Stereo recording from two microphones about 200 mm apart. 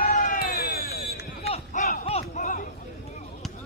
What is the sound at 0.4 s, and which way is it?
Basketball bounce, 50° left (ahead or behind).